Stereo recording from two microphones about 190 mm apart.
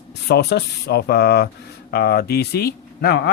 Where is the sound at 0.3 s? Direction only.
60° left (ahead or behind).